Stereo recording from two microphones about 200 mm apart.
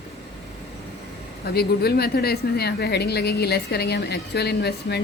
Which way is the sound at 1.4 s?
50° left (ahead or behind).